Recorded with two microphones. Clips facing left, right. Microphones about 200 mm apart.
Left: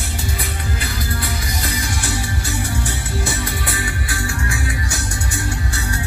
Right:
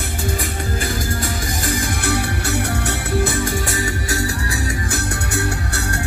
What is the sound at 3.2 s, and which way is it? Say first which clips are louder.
Music: right 5 dB; 45° right (ahead or behind).